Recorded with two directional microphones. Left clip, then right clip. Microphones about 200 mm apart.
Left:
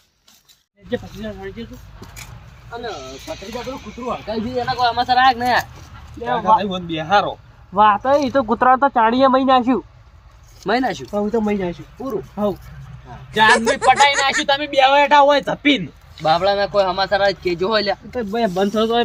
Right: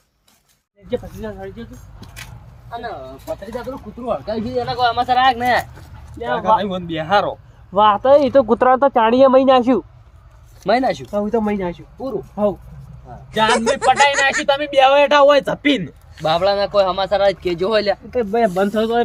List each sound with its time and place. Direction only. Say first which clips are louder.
2.6 s speech: right 1 dB; 15° right (ahead or behind)
4.3 s a sound: even; 5° right (ahead or behind)
4.9 s speech: even; 35° right (ahead or behind)
6.2 s speech: left 1 dB; 5° right (ahead or behind)
7.8 s speech: right 2 dB; 20° right (ahead or behind)
10.6 s speech: right 3 dB; 40° right (ahead or behind)
11.1 s speech: right 1 dB; 10° left (ahead or behind)
13.4 s a sound: left 2 dB; centre (ahead or behind)
14.6 s speech: right 2 dB; 20° right (ahead or behind)
17.1 s speech: right 1 dB; 30° right (ahead or behind)
18.1 s a sound: right 4 dB; 5° right (ahead or behind)